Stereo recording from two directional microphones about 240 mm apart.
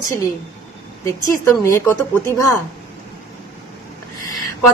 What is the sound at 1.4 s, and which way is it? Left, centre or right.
Speech, centre.